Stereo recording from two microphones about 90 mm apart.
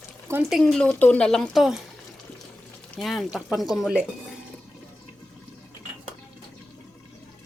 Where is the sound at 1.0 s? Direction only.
15° left (ahead or behind).